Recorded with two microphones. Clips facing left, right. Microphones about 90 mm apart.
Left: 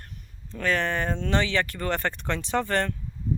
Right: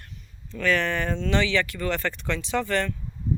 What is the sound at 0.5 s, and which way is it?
Speech, 35° left (ahead or behind).